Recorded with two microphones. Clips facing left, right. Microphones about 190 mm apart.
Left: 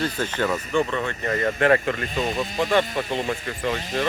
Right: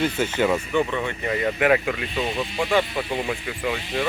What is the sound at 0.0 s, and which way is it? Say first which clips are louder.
Speech: right 3 dB; 10° right (ahead or behind).